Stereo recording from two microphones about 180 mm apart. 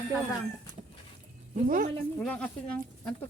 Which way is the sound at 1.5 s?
45° right (ahead or behind).